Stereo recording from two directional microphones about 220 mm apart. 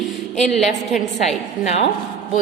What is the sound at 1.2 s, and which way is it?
Speech, 30° left (ahead or behind).